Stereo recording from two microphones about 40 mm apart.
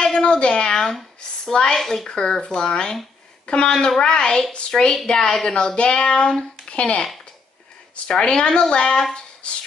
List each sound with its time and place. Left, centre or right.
0.0 s a woman's voice: left
0.7 s a sound: centre
1.4 s speech: centre
1.8 s speech: centre
2.0 s speech: centre
8.1 s speech: left
9.4 s music: left